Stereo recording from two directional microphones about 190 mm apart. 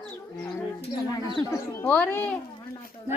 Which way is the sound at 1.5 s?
10° left (ahead or behind).